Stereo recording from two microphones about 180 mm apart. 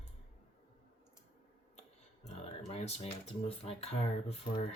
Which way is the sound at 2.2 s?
35° left (ahead or behind).